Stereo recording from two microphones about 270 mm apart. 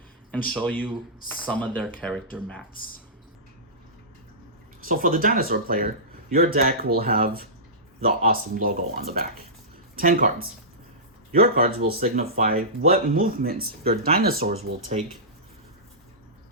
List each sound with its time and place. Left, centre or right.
0.5 s speech: centre
4.9 s speech: right